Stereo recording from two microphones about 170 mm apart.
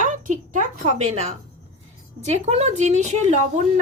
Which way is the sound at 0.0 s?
50° right (ahead or behind).